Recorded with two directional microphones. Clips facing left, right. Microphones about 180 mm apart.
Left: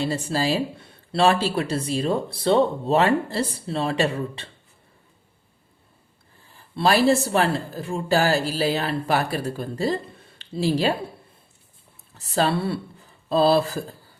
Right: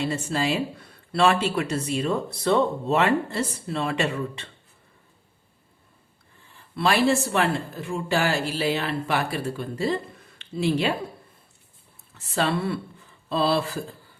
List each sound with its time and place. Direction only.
0.0 s speech: 35° left (ahead or behind)
6.4 s speech: 35° left (ahead or behind)
12.1 s speech: 35° left (ahead or behind)